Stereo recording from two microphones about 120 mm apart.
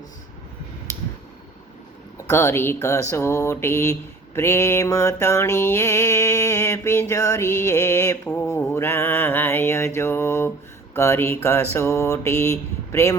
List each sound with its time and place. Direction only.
2.1 s mantra: 20° left (ahead or behind)